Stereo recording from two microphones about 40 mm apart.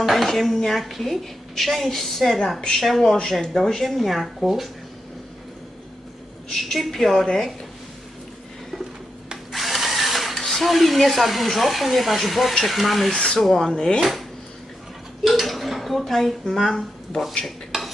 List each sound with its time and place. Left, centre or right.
0.0 s a woman's voice: centre
3.0 s a woman's voice: centre
6.5 s a woman's voice: centre
9.5 s drill: centre
11.5 s a woman's voice: centre
13.1 s speech: left
13.4 s speech: centre
13.7 s speech: centre
14.0 s speech: centre
15.2 s dishes: centre